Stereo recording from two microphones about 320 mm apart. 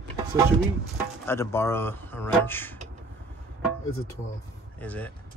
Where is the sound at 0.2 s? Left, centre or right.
Centre.